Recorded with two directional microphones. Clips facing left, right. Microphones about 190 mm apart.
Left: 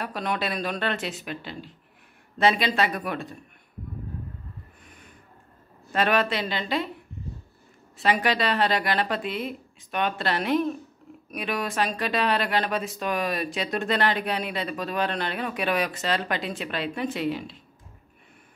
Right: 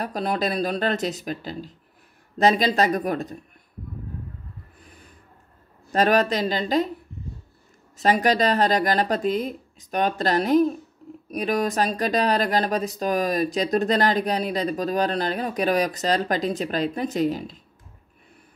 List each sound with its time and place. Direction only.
0.0 s speech: 35° right (ahead or behind)
4.8 s a sound: 35° right (ahead or behind)
5.9 s speech: 40° right (ahead or behind)
8.0 s speech: 40° right (ahead or behind)